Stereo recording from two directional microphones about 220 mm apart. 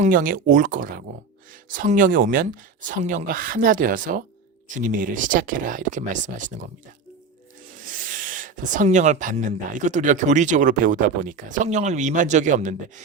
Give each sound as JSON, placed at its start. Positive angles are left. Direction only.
{"t": 0.0, "sound": "speech", "side_deg": -40}
{"t": 7.9, "sound": "speech", "side_deg": -35}